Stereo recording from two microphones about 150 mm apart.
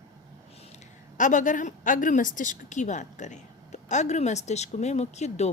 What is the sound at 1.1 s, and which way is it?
A woman's voice, 60° left (ahead or behind).